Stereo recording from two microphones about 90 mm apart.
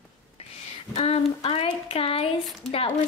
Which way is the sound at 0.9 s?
90° left.